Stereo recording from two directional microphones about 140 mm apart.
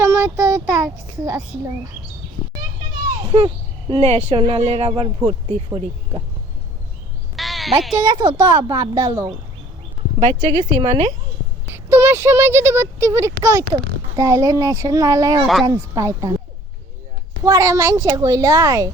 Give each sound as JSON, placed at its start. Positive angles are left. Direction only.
{"t": 0.0, "sound": "a child's voice", "side_deg": -25}
{"t": 3.3, "sound": "speech", "side_deg": -40}
{"t": 7.3, "sound": "a sound", "side_deg": 0}
{"t": 7.9, "sound": "speech", "side_deg": -30}
{"t": 10.2, "sound": "speech", "side_deg": -50}
{"t": 11.7, "sound": "speech", "side_deg": -15}
{"t": 17.4, "sound": "speech", "side_deg": -20}